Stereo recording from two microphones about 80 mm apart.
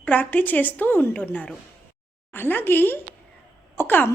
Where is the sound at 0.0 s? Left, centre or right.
Centre.